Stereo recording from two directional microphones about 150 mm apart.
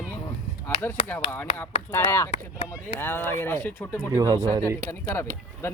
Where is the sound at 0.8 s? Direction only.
15° left (ahead or behind).